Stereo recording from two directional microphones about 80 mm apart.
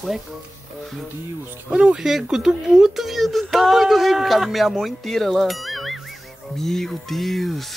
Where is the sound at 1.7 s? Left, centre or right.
Centre.